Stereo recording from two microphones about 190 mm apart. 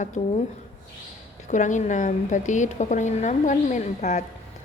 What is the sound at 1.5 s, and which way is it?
A woman's voice, 40° left (ahead or behind).